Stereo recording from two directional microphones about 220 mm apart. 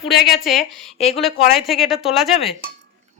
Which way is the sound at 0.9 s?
30° left (ahead or behind).